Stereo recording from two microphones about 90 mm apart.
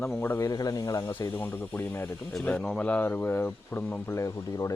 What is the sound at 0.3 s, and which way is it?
Speech, 40° left (ahead or behind).